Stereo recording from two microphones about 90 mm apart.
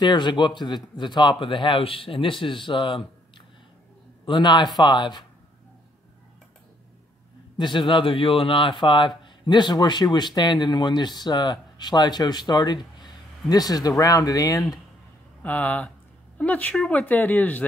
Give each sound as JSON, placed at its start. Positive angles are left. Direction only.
{"t": 0.0, "sound": "a man's voice", "side_deg": 55}
{"t": 4.3, "sound": "speech", "side_deg": 55}
{"t": 7.5, "sound": "speech", "side_deg": 60}
{"t": 15.4, "sound": "speech", "side_deg": 15}